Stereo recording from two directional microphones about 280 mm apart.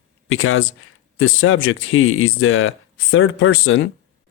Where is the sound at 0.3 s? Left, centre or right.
Left.